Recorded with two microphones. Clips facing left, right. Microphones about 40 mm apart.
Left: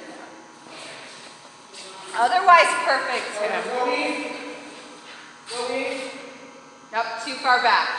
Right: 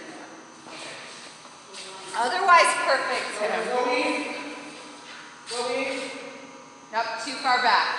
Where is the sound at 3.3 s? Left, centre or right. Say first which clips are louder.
Left 1 dB; left.